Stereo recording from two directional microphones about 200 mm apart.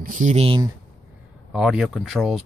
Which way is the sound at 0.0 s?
40° right (ahead or behind).